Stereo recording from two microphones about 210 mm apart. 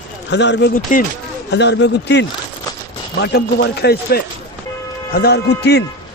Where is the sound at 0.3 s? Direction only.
55° left (ahead or behind).